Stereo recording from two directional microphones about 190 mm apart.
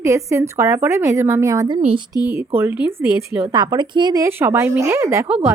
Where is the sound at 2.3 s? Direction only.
10° right (ahead or behind).